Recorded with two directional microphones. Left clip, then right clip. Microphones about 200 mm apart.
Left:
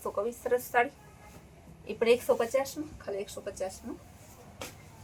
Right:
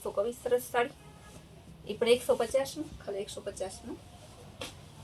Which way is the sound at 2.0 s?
15° left (ahead or behind).